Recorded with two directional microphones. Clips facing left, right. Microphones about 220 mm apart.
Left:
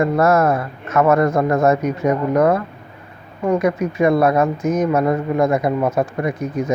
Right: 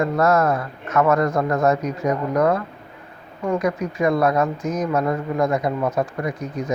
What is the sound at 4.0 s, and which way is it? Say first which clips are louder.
Speech: left 4 dB; 25° left (ahead or behind).